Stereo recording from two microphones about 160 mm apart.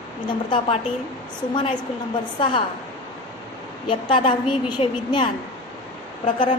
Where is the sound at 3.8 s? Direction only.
30° left (ahead or behind).